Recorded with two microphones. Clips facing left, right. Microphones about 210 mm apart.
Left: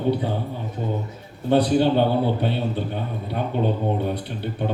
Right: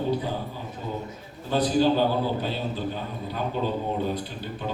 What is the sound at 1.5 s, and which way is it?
A man's voice, 65° left (ahead or behind).